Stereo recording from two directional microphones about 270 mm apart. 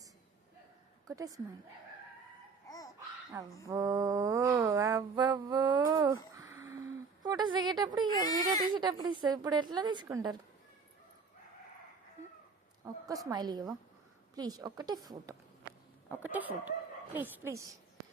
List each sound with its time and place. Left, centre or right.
1.0 s a woman's voice: centre
2.6 s babbling: centre
3.3 s a woman's voice: centre
3.7 s mantra: centre
8.7 s a woman's voice: centre
12.8 s a woman's voice: centre